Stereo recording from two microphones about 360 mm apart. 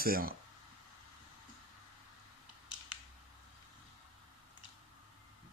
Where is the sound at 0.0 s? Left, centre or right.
Right.